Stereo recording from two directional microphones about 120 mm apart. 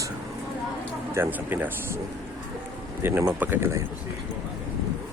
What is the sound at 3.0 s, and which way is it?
Speech, 20° right (ahead or behind).